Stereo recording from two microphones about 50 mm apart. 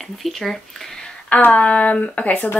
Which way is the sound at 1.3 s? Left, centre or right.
Left.